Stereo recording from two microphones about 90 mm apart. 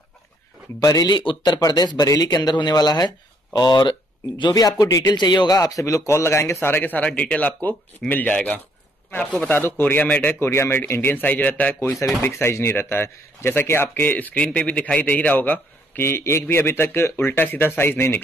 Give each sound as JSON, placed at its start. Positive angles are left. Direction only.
{"t": 0.7, "sound": "a man's voice", "side_deg": 40}
{"t": 5.1, "sound": "a man's voice", "side_deg": 55}
{"t": 10.0, "sound": "speech", "side_deg": 15}
{"t": 10.4, "sound": "speech", "side_deg": 30}